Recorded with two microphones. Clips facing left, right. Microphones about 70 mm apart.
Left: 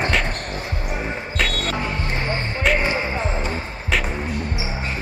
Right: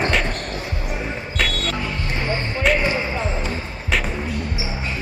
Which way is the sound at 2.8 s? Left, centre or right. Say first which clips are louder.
Even; left.